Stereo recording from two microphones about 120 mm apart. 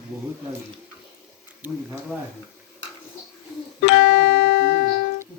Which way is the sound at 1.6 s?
15° right (ahead or behind).